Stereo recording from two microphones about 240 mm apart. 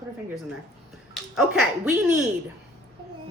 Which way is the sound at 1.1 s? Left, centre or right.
Centre.